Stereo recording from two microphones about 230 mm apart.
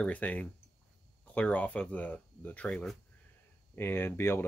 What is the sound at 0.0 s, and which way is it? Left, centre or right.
Speech, centre.